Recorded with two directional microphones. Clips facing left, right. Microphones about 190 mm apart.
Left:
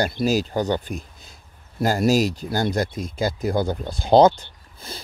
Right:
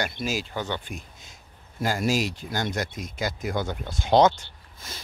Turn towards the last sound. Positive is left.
turn(degrees=35)  # may be behind; listen again after turning